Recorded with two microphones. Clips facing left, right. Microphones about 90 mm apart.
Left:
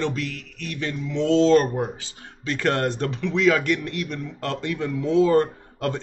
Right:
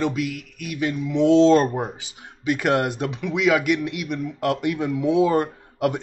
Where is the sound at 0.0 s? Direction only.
10° right (ahead or behind).